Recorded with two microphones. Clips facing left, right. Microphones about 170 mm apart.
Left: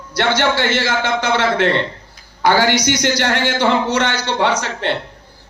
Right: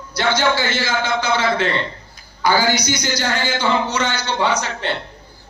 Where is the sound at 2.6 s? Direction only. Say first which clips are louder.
Left 3 dB; 85° left.